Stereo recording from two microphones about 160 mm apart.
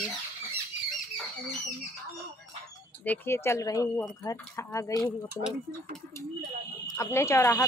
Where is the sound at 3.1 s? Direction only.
15° left (ahead or behind).